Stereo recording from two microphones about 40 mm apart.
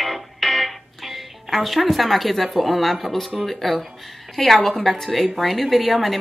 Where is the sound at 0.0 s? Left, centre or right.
Centre.